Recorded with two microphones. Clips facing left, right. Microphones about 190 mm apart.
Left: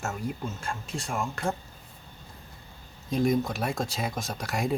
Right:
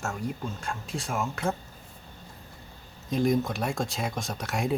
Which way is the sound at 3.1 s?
Centre (ahead or behind).